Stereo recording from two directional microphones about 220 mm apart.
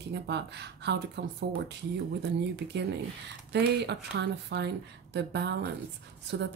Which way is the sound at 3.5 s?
50° right (ahead or behind).